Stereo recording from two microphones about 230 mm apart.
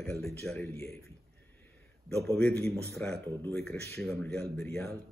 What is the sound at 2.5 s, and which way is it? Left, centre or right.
Speech, right.